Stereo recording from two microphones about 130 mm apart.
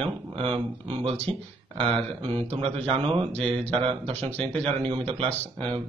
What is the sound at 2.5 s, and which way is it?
Speech, 45° right (ahead or behind).